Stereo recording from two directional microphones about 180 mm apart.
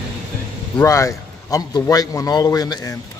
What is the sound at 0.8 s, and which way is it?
A man's voice, 15° left (ahead or behind).